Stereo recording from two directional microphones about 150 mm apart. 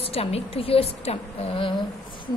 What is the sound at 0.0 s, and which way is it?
A woman's voice, 40° left (ahead or behind).